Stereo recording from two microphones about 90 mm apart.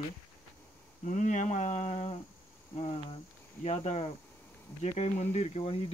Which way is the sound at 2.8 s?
90° left.